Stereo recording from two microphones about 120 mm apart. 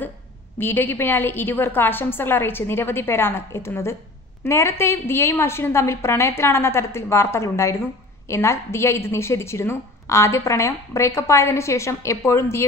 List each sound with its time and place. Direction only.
0.6 s a woman's voice: 15° left (ahead or behind)